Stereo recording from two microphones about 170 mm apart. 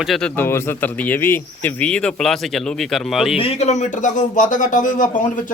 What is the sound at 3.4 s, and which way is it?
Speech, 40° left (ahead or behind).